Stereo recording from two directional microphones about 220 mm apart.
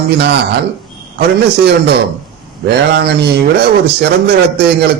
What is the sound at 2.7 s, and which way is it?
Speech, 50° right (ahead or behind).